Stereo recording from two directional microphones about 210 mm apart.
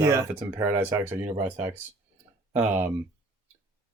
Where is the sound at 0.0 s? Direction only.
10° right (ahead or behind).